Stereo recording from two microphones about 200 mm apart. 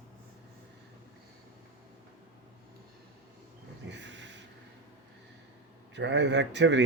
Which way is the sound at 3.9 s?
60° right (ahead or behind).